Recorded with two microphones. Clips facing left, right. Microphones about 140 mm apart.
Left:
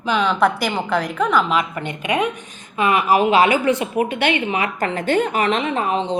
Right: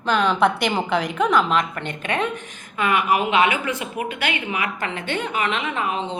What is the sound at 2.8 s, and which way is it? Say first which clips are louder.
A woman's voice: left 4 dB; 25° left (ahead or behind).